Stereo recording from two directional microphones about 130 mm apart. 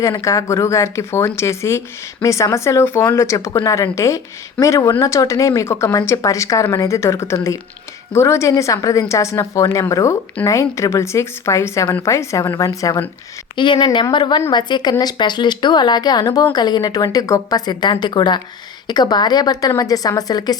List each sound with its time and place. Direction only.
0.0 s speech: 25° left (ahead or behind)
13.6 s speech: 35° left (ahead or behind)